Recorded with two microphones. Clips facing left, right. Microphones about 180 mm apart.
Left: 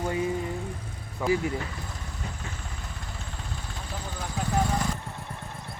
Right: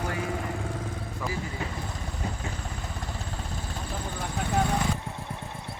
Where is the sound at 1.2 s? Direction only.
Centre (ahead or behind).